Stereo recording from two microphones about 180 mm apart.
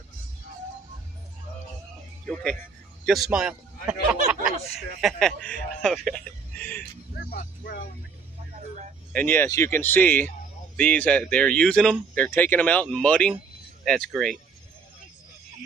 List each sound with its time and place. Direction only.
3.1 s a sound: 5° right (ahead or behind)
5.0 s speech: 5° left (ahead or behind)
7.2 s speech: 50° left (ahead or behind)
9.1 s speech: 10° left (ahead or behind)